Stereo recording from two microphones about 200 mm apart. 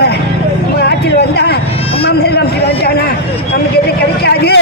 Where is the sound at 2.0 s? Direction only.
55° left (ahead or behind).